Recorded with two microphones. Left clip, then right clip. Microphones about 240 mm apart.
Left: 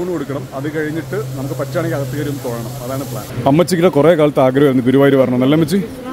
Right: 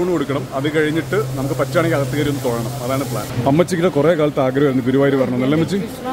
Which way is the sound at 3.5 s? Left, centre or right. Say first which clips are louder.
Left 4 dB; left.